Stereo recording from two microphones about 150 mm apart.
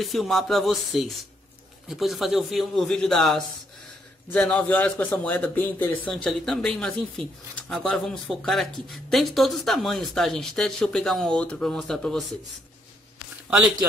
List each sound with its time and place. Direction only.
0.0 s a man's voice: centre (ahead or behind)